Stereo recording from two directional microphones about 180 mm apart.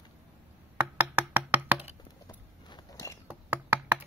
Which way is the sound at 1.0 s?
10° right (ahead or behind).